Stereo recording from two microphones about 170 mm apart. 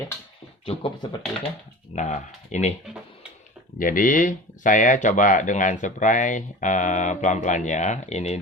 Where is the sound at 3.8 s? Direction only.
55° left (ahead or behind).